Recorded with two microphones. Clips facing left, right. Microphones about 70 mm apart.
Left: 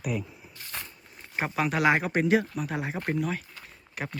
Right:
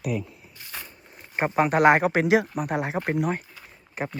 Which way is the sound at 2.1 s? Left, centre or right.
Right.